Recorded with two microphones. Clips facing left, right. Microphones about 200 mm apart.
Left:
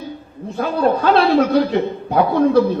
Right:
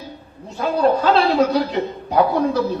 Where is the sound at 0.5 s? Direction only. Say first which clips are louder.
Even; 55° left (ahead or behind).